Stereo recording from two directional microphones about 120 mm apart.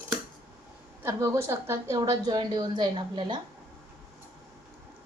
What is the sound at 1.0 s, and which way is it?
A woman's voice, 20° right (ahead or behind).